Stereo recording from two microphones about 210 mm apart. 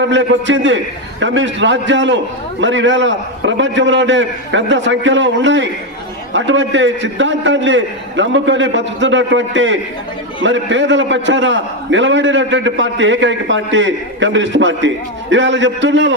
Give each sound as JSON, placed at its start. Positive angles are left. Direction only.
{"t": 0.1, "sound": "a man's voice", "side_deg": -60}